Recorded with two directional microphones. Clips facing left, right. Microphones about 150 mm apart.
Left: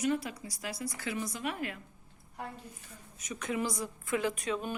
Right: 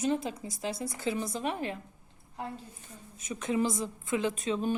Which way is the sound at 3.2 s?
25° right (ahead or behind).